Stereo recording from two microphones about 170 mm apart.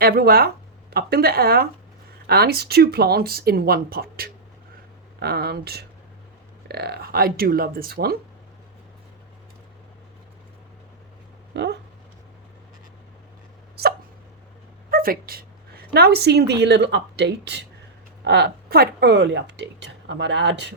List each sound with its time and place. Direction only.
0.0 s speech: 60° right (ahead or behind)
11.5 s speech: 85° right
14.8 s a woman's voice: 60° right (ahead or behind); by 20.7 s 90° right